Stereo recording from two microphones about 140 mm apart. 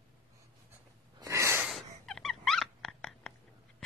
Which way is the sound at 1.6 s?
Centre (ahead or behind).